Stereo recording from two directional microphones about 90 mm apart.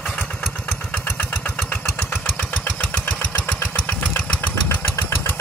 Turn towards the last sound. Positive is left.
turn(degrees=25)  # may be behind; listen again after turning